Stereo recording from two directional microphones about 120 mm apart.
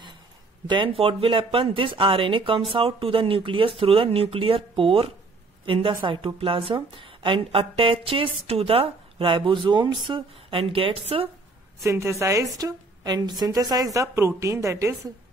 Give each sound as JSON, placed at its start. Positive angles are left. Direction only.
{"t": 0.7, "sound": "a woman's voice", "side_deg": -45}
{"t": 11.8, "sound": "a woman's voice", "side_deg": -25}